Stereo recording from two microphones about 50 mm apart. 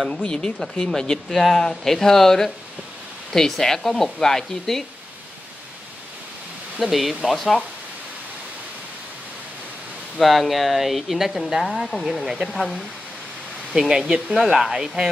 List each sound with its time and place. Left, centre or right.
0.1 s speech: centre
6.8 s speech: centre
10.1 s speech: centre
13.7 s speech: centre